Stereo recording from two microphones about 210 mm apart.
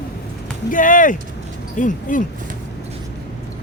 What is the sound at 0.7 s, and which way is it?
Speech, 40° left (ahead or behind).